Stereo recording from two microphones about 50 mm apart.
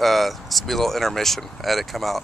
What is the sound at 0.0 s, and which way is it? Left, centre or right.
Speech, centre.